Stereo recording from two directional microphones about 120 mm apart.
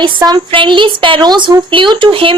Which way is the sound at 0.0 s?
35° right (ahead or behind).